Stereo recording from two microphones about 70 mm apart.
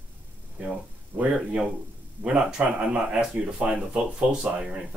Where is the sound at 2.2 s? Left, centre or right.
Centre.